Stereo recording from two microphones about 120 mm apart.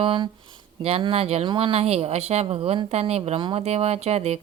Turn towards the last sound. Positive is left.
turn(degrees=-60)  # may be behind; listen again after turning